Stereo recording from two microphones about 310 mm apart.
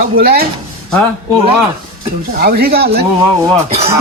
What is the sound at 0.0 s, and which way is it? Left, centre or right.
Speech, right.